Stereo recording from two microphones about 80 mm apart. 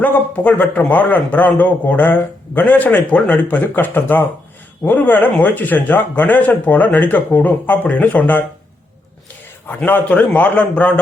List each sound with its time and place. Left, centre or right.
0.0 s speech: centre
9.6 s a man's voice: left